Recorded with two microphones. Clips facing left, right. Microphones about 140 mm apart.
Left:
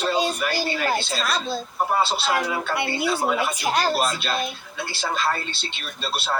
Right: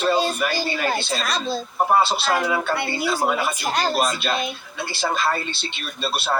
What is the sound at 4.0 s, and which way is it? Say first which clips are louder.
Speech: right 2 dB; 15° right (ahead or behind).